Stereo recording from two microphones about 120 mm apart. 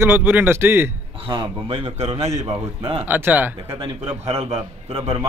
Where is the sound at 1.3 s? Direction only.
45° right (ahead or behind).